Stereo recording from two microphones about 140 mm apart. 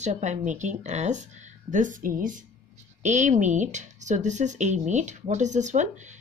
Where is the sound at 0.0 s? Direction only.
60° right (ahead or behind).